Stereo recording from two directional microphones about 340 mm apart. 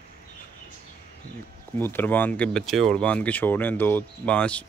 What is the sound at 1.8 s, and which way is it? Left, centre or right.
Speech, centre.